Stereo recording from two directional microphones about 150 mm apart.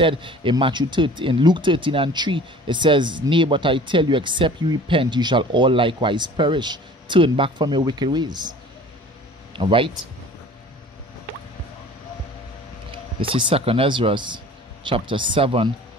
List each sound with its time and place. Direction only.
0.0 s speech: 35° right (ahead or behind)
12.9 s speech: 35° right (ahead or behind)